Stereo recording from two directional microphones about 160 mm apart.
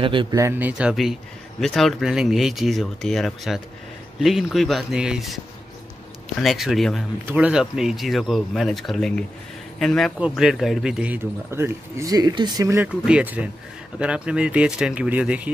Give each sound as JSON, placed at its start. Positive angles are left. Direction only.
{"t": 0.0, "sound": "speech", "side_deg": -30}
{"t": 0.4, "sound": "speech", "side_deg": -15}